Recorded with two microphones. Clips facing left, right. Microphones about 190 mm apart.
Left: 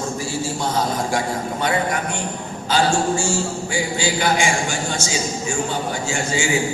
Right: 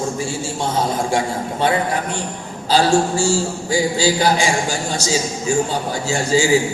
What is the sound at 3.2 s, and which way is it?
Speech, 35° right (ahead or behind).